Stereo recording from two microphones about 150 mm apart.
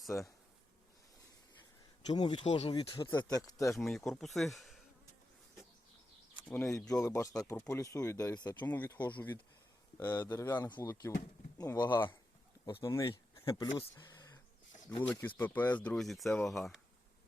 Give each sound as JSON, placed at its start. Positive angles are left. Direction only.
{"t": 2.0, "sound": "speech", "side_deg": 30}
{"t": 3.8, "sound": "speech", "side_deg": 5}
{"t": 6.4, "sound": "a sound", "side_deg": 5}
{"t": 6.7, "sound": "speech", "side_deg": 20}
{"t": 15.0, "sound": "speech", "side_deg": 10}